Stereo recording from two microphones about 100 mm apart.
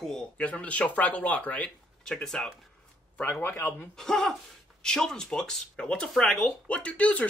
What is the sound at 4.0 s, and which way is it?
Speech, 5° left (ahead or behind).